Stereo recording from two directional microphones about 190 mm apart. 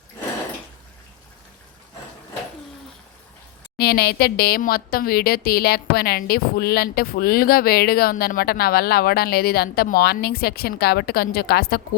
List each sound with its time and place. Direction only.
3.8 s speech: 55° left (ahead or behind)